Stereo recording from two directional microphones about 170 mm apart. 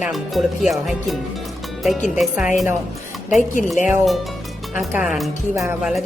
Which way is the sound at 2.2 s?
5° right (ahead or behind).